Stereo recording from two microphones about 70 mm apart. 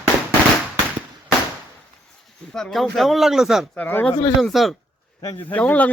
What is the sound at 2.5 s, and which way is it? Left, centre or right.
Speech, centre.